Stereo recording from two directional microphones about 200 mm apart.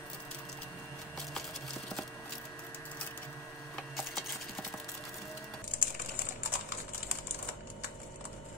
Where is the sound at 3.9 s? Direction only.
Centre (ahead or behind).